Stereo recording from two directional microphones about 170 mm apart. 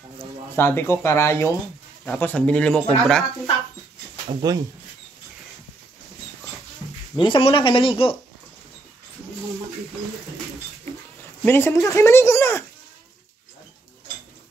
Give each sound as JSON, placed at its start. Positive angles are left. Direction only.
{"t": 0.6, "sound": "speech", "side_deg": 15}
{"t": 4.4, "sound": "speech", "side_deg": -25}
{"t": 7.2, "sound": "speech", "side_deg": 30}
{"t": 11.4, "sound": "speech", "side_deg": 15}